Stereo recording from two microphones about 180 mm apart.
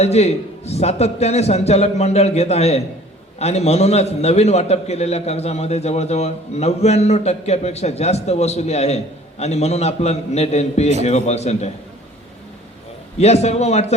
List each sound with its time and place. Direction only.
0.0 s a man's voice: 35° left (ahead or behind)
13.1 s a man's voice: 35° left (ahead or behind)